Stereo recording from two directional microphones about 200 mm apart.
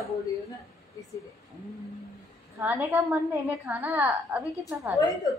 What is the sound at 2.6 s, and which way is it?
A woman's voice, 10° right (ahead or behind).